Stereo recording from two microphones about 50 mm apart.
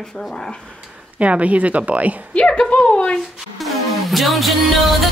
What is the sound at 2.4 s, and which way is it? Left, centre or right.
Speech, centre.